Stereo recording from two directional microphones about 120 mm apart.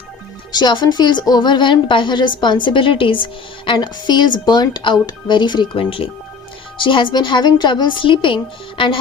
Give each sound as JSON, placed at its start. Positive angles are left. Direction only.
{"t": 0.5, "sound": "a woman's voice", "side_deg": 40}